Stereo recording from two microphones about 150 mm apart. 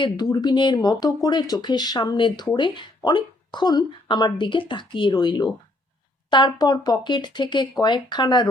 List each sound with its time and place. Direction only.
0.0 s speech: 30° left (ahead or behind)